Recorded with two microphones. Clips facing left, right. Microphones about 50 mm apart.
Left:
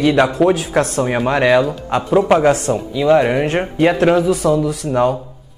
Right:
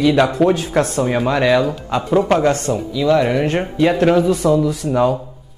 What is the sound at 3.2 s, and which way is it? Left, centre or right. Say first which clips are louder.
Speech: left 1 dB; centre.